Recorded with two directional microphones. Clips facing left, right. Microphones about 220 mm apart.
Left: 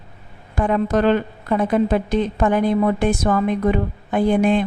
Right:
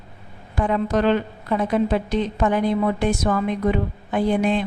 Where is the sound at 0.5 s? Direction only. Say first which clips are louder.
Left 2 dB; 50° left (ahead or behind).